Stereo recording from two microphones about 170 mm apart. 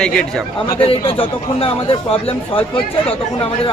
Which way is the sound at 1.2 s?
30° left (ahead or behind).